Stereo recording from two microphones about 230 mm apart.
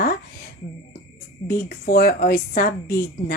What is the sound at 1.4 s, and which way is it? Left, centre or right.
A woman's voice, left.